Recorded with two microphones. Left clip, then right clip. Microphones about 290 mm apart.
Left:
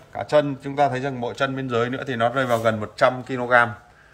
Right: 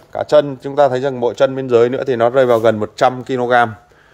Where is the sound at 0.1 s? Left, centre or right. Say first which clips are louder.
Right 7 dB; right.